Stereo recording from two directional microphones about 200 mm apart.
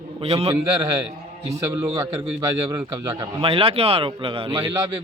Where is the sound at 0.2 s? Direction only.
30° right (ahead or behind).